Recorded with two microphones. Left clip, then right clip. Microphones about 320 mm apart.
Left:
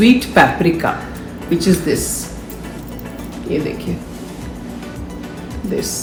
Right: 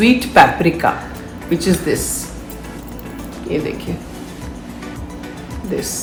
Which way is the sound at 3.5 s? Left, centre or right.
Right.